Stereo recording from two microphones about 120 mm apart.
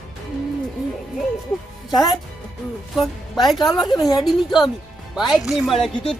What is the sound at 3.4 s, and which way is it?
Speech, 35° left (ahead or behind).